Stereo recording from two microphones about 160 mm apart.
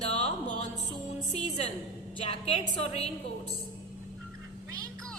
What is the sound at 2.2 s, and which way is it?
Speech, 35° left (ahead or behind).